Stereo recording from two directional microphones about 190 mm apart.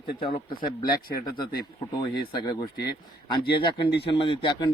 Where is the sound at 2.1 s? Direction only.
25° left (ahead or behind).